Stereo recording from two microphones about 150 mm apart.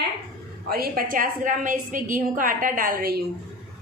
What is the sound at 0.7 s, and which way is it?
A woman's voice, 80° right.